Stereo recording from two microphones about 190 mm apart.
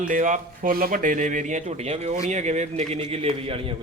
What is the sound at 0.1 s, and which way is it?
Speech, 45° right (ahead or behind).